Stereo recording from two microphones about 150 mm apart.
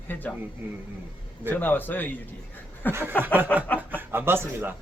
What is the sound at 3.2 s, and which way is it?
Speech, 15° right (ahead or behind).